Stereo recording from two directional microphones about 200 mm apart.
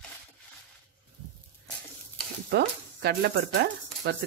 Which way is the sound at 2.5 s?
55° right (ahead or behind).